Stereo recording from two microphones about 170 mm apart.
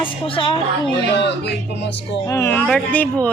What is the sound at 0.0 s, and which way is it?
Speech, 30° left (ahead or behind).